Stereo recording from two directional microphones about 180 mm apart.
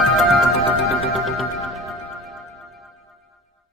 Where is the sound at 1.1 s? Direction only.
Centre (ahead or behind).